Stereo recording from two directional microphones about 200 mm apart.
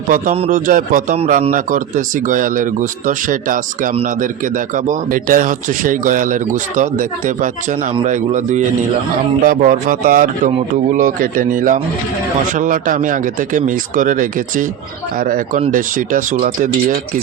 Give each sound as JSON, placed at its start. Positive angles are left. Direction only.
{"t": 0.1, "sound": "speech", "side_deg": -35}